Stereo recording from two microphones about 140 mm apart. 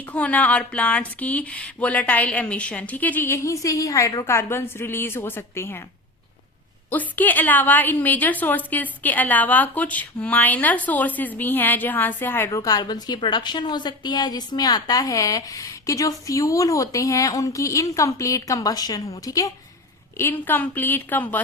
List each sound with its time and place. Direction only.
0.0 s speech: 10° left (ahead or behind)
6.9 s a woman's voice: 10° left (ahead or behind)